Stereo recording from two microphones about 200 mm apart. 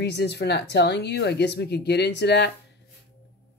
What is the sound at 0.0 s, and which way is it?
Speech, 55° left (ahead or behind).